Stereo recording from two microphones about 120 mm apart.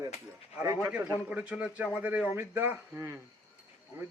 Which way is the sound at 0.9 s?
10° right (ahead or behind).